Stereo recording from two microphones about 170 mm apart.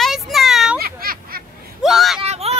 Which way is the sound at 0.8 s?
60° right (ahead or behind).